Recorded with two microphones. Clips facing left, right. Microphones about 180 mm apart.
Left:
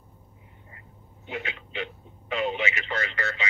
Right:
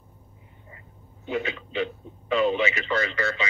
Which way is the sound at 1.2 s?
35° right (ahead or behind).